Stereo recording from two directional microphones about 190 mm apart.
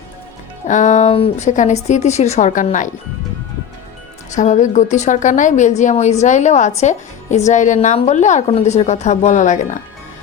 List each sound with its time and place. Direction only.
0.7 s speech: 40° left (ahead or behind)
4.3 s speech: 40° left (ahead or behind)